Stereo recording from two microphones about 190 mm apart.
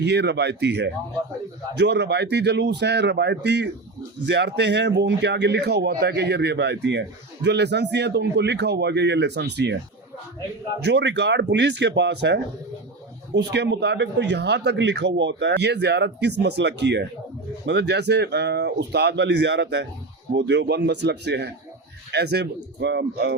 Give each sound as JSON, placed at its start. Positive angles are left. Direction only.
{"t": 0.0, "sound": "speech", "side_deg": -65}
{"t": 10.8, "sound": "speech", "side_deg": -65}